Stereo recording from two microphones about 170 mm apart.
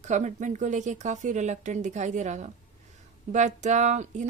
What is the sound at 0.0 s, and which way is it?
A woman's voice, 45° right (ahead or behind).